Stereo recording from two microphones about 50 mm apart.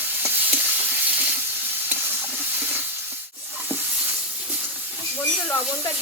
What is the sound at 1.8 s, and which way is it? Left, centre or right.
Stir, right.